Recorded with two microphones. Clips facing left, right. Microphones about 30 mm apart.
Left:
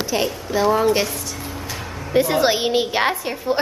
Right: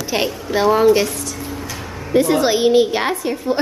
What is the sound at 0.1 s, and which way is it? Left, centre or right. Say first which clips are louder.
Speech: right 4 dB; right.